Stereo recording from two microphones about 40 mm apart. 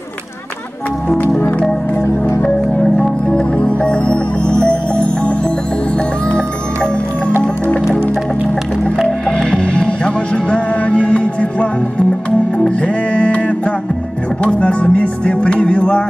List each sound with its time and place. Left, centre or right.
1.0 s music: left
3.0 s music: left
9.5 s music: left